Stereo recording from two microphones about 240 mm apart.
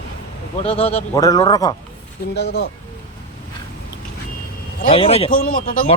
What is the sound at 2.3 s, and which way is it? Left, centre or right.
Speech, left.